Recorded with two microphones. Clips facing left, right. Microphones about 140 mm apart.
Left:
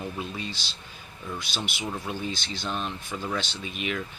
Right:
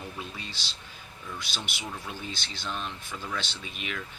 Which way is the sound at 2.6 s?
30° left (ahead or behind).